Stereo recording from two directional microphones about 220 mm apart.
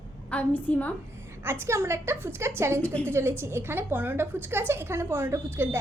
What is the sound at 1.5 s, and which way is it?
A woman's voice, 10° right (ahead or behind).